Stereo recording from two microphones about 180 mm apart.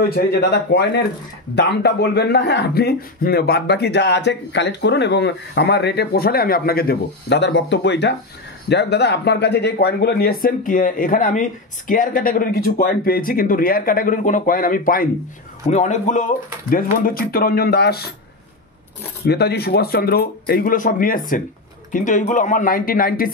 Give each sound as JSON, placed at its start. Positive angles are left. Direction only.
{"t": 0.1, "sound": "speech", "side_deg": 60}
{"t": 16.7, "sound": "speech", "side_deg": 55}
{"t": 19.2, "sound": "speech", "side_deg": 65}